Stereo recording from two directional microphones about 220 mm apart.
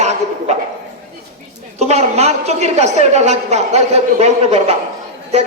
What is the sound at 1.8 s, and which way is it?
A woman's voice, 30° right (ahead or behind).